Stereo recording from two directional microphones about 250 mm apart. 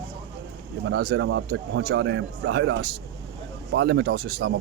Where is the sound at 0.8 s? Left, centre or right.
Right.